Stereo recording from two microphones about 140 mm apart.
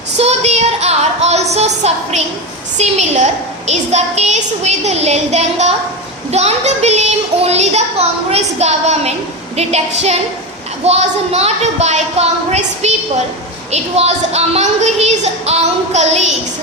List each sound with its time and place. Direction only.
0.2 s a woman's voice: 50° right (ahead or behind)